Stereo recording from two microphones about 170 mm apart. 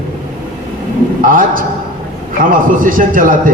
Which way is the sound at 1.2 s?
55° right (ahead or behind).